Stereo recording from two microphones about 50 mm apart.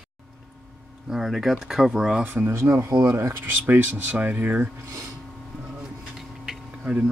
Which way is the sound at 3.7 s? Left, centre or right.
Right.